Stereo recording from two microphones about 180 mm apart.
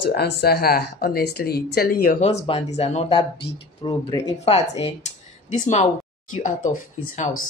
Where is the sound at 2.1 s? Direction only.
35° left (ahead or behind).